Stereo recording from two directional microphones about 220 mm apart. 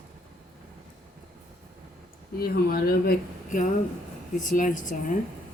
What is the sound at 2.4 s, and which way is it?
Speech, 40° left (ahead or behind).